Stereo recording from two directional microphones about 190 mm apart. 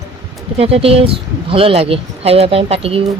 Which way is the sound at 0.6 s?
30° right (ahead or behind).